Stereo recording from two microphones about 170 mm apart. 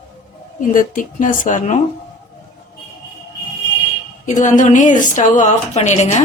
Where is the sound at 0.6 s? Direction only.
50° left (ahead or behind).